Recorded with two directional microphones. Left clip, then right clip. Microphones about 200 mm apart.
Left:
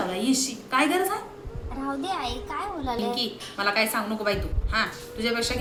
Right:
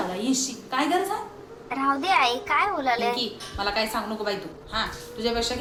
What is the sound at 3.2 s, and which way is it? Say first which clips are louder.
A woman's voice: left 1 dB; 15° left (ahead or behind).